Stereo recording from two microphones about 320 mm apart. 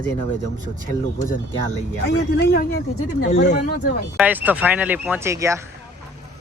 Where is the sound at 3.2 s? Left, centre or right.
Left.